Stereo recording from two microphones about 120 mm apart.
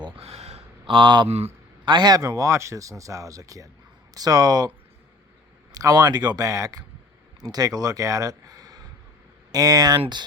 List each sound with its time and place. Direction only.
0.2 s a sound: 60° right (ahead or behind)
0.9 s speech: 40° right (ahead or behind)
5.7 s speech: 30° right (ahead or behind)